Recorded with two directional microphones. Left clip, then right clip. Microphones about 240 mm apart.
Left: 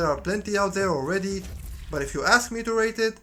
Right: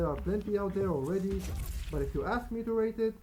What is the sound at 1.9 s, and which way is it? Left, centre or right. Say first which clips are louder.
Speech: left 13 dB; centre.